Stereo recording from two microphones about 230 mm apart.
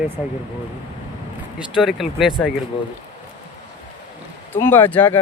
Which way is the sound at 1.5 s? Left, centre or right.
Centre.